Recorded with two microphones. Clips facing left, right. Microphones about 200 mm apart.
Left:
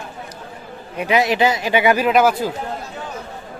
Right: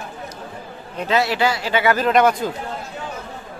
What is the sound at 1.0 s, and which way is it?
Speech, 15° left (ahead or behind).